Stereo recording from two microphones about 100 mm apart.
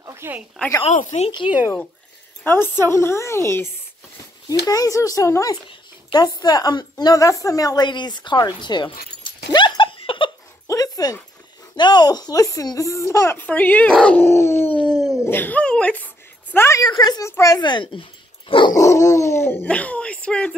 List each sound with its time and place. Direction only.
0.0 s a sound: 25° right (ahead or behind)
0.8 s speech: 90° left
2.4 s speech: 20° left (ahead or behind)
4.5 s a woman's voice: 40° left (ahead or behind); by 10.3 s 60° left (ahead or behind)
10.7 s dog: 40° left (ahead or behind)
11.7 s speech: 45° left (ahead or behind); by 13.4 s 30° left (ahead or behind)
13.4 s speech: 15° left (ahead or behind)
14.8 s dog: 5° left (ahead or behind)
15.2 s speech: 20° left (ahead or behind)
16.5 s speech: 25° left (ahead or behind)
16.8 s speech: 40° left (ahead or behind)
18.7 s speech: 30° left (ahead or behind); by 20.5 s 10° left (ahead or behind)